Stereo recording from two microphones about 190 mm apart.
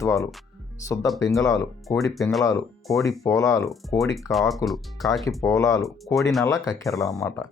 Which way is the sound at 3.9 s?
Centre (ahead or behind).